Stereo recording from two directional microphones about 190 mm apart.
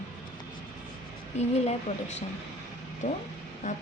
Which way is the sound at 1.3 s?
35° left (ahead or behind).